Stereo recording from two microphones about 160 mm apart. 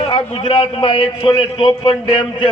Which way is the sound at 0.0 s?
35° left (ahead or behind).